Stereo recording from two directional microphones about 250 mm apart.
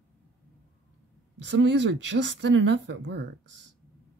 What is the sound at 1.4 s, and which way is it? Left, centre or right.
Speech, right.